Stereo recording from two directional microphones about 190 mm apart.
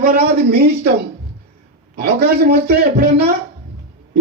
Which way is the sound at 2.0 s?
55° right (ahead or behind).